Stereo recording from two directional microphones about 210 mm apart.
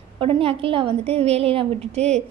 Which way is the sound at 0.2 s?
25° right (ahead or behind).